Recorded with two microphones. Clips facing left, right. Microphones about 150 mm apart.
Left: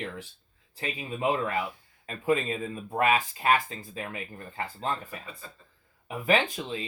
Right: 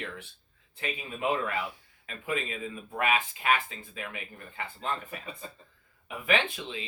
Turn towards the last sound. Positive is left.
turn(degrees=40)  # may be behind; listen again after turning